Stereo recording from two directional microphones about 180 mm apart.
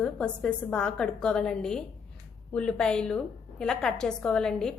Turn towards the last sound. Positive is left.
turn(degrees=5)  # may be behind; listen again after turning